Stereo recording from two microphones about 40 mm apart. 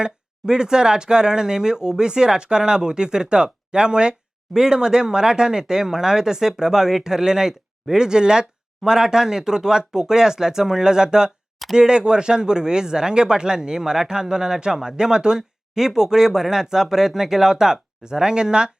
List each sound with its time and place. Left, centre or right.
0.0 s speech: centre